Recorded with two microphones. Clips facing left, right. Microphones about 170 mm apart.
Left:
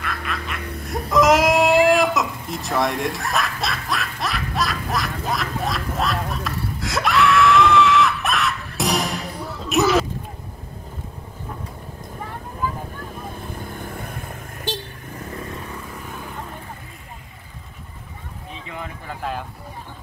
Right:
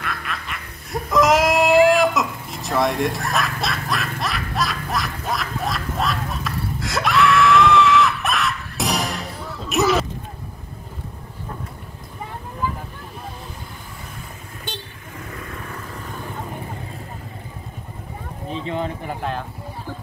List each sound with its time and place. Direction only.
0.0 s music: centre (ahead or behind)
13.7 s vehicle: 55° left (ahead or behind)
15.3 s vehicle: 30° left (ahead or behind)
18.5 s a sound: 30° right (ahead or behind)
19.2 s clip-clop: centre (ahead or behind)